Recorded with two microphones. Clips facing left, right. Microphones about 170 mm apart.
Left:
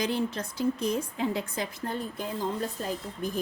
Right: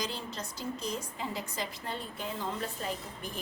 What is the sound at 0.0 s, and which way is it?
A woman's voice, 55° left (ahead or behind).